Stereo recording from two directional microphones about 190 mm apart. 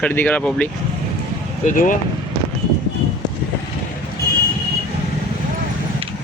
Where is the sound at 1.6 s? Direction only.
45° left (ahead or behind).